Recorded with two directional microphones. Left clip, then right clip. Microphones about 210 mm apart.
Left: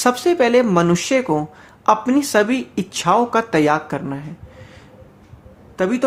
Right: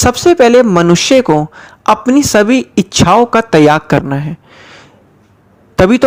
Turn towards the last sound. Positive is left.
turn(degrees=-40)  # may be behind; listen again after turning